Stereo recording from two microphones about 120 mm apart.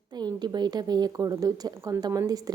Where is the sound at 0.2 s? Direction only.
35° right (ahead or behind).